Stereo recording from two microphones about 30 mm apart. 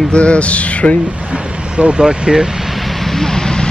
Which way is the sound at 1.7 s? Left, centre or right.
Right.